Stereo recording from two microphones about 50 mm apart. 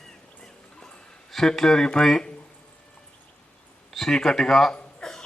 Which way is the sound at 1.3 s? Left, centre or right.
Centre.